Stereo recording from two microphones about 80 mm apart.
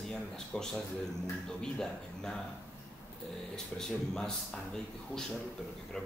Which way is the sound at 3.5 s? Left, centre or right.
Centre.